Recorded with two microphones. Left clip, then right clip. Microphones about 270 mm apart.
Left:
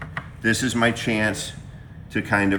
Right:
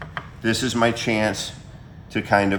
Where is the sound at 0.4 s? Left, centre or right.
Centre.